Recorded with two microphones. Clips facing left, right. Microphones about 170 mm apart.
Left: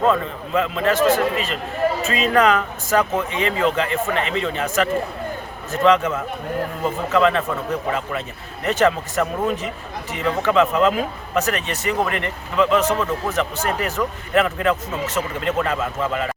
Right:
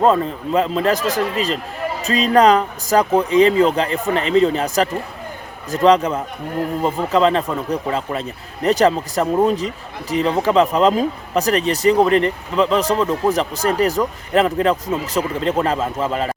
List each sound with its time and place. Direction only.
0.0 s speech: 35° right (ahead or behind)